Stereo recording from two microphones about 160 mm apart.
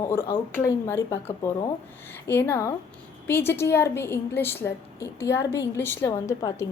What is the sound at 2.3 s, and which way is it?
A woman's voice, 15° left (ahead or behind).